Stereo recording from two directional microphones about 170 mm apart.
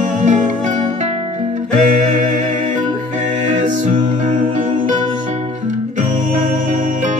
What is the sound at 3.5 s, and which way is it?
Music, 50° right (ahead or behind).